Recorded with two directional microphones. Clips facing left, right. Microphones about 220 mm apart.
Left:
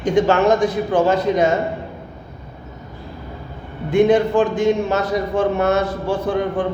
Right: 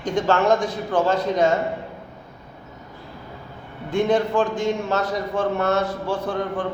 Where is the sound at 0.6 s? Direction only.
20° left (ahead or behind).